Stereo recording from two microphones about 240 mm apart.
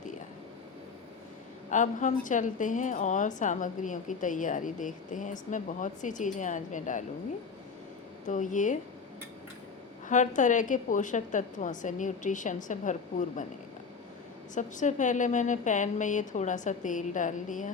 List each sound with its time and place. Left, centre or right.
1.7 s a woman's voice: left
8.3 s a woman's voice: left
10.1 s a woman's voice: left
14.5 s a woman's voice: left